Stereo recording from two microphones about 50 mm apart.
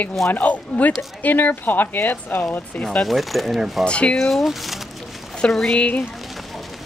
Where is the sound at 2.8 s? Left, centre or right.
Centre.